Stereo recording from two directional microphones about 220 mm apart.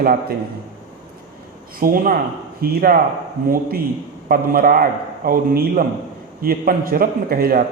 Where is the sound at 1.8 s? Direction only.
40° right (ahead or behind).